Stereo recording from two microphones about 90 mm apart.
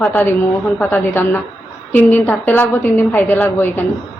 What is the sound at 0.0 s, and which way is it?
A woman's voice, 20° left (ahead or behind).